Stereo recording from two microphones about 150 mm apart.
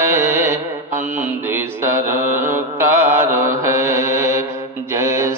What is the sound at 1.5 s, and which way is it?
Mantra, 15° right (ahead or behind).